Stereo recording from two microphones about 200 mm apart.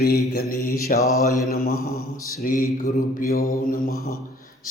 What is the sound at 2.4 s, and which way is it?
A man's voice, 40° left (ahead or behind).